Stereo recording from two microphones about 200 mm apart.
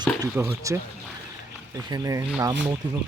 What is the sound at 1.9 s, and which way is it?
Speech, 15° right (ahead or behind).